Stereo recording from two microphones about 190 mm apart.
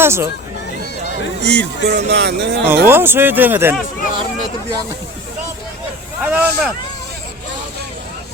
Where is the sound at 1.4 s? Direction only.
60° right (ahead or behind).